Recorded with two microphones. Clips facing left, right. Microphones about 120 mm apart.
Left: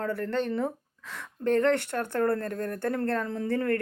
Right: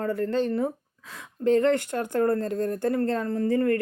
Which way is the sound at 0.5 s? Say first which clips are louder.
Right 3 dB; 10° right (ahead or behind).